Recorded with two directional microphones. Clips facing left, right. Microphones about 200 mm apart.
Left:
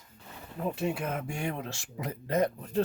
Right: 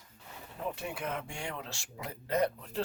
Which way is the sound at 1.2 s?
55° left (ahead or behind).